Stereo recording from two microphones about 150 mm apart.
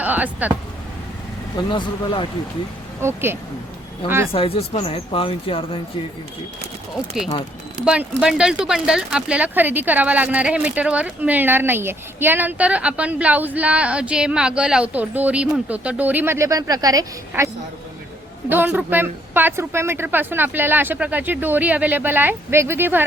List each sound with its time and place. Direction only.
0.0 s speech: 10° right (ahead or behind)
1.5 s speech: 30° left (ahead or behind)
3.0 s a woman's voice: 15° right (ahead or behind)
4.3 s speech: 40° left (ahead or behind)
7.9 s a woman's voice: 5° right (ahead or behind)